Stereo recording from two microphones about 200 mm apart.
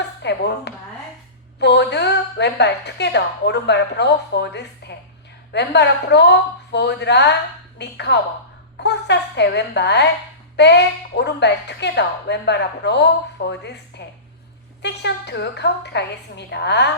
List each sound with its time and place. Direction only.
0.2 s speech: 60° left (ahead or behind)
14.8 s speech: 60° left (ahead or behind)